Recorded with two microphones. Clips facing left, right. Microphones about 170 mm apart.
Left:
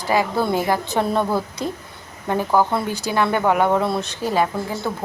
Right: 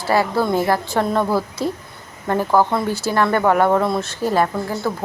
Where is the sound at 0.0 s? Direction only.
15° left (ahead or behind).